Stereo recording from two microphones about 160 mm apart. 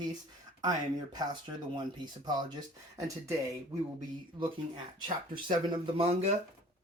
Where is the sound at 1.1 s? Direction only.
25° right (ahead or behind).